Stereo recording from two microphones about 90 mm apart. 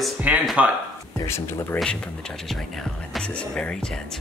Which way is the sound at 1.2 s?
30° left (ahead or behind).